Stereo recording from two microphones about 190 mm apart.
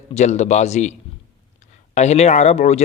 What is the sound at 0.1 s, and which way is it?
Speech, 35° left (ahead or behind).